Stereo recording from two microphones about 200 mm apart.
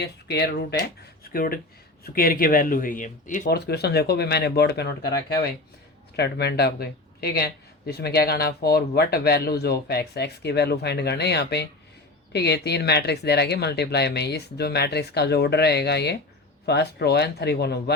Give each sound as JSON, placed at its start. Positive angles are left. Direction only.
{"t": 0.0, "sound": "speech", "side_deg": 55}
{"t": 1.2, "sound": "a sound", "side_deg": 45}
{"t": 2.0, "sound": "speech", "side_deg": 45}